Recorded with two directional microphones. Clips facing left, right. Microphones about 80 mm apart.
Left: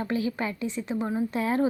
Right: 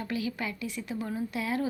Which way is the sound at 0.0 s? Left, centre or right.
Left.